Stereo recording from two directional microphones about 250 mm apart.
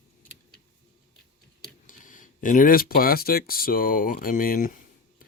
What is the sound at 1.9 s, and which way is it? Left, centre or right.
Speech, left.